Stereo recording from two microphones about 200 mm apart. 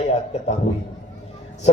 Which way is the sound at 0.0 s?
35° left (ahead or behind).